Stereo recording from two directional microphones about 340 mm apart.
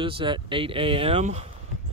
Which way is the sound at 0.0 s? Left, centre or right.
Centre.